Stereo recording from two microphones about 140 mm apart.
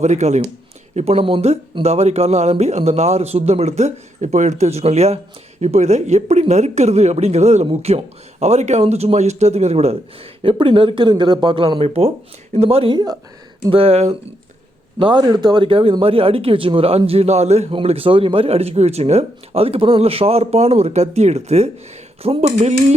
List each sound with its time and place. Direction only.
0.0 s a man's voice: 55° right (ahead or behind); by 13.1 s 30° right (ahead or behind)
13.7 s a man's voice: 45° right (ahead or behind)
14.9 s a man's voice: 35° right (ahead or behind); by 23.0 s 50° right (ahead or behind)